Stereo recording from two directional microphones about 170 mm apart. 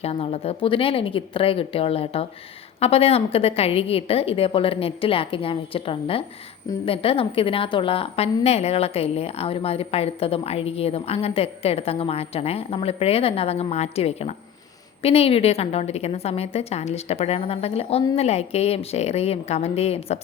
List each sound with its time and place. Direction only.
0.0 s a woman's voice: 35° left (ahead or behind)